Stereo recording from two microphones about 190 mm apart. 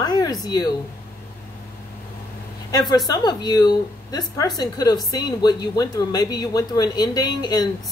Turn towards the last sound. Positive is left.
turn(degrees=20)  # may be behind; listen again after turning